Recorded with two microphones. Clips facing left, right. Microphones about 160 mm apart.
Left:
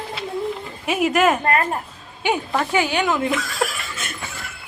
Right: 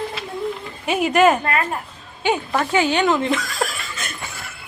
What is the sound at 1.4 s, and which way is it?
Speech, 45° left (ahead or behind).